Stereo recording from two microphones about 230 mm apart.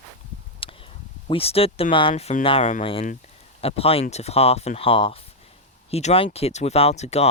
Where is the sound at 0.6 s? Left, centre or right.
Left.